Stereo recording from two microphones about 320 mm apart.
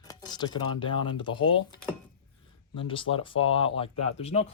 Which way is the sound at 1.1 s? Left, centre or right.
Centre.